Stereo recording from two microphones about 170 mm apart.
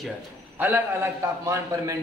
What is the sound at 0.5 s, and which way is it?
A man's voice, 10° right (ahead or behind).